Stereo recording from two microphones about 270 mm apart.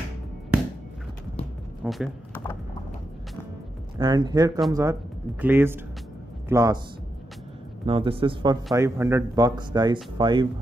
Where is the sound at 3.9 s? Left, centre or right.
Centre.